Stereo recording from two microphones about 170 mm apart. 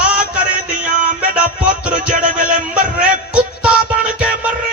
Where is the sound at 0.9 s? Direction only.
50° right (ahead or behind).